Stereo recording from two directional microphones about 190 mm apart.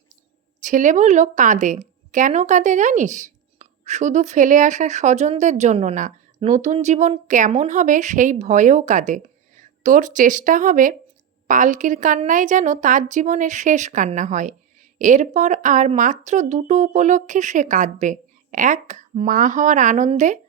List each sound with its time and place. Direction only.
0.6 s a woman's voice: 40° right (ahead or behind)